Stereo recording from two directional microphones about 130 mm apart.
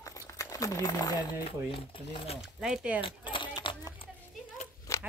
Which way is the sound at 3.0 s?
40° left (ahead or behind).